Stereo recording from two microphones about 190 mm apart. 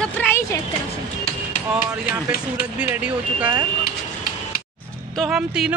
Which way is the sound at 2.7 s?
10° right (ahead or behind).